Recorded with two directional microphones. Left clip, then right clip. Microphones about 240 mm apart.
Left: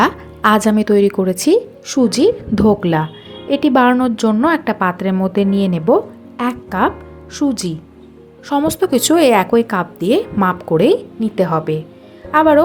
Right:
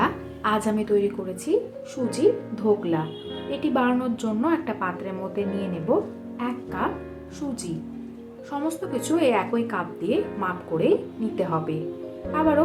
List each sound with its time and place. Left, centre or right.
0.0 s a woman's voice: left